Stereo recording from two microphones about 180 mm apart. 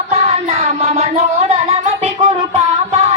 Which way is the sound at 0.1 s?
35° right (ahead or behind).